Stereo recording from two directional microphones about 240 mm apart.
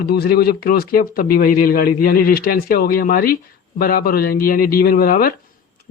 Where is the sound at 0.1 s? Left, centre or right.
Left.